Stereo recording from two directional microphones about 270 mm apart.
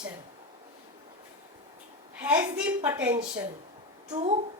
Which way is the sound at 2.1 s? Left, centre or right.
Centre.